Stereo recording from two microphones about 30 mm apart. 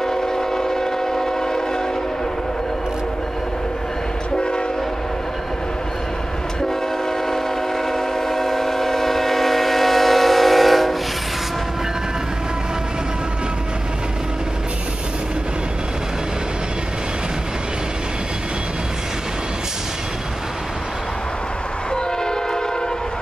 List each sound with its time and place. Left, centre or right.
0.0 s train: centre
6.6 s train: centre
21.9 s train: left